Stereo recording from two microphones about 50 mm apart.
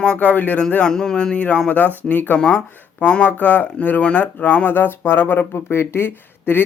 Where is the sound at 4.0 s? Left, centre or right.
Left.